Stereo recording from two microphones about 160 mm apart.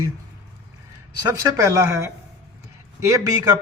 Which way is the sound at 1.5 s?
20° right (ahead or behind).